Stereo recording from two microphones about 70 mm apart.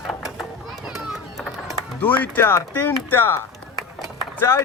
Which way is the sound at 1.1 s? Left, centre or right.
Centre.